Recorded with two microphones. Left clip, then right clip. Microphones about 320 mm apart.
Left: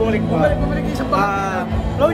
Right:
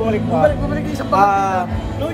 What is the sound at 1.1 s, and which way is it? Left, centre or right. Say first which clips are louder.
Music: right 5 dB; centre.